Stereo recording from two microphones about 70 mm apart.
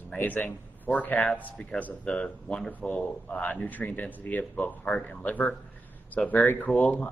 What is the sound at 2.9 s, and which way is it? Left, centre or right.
Speech, left.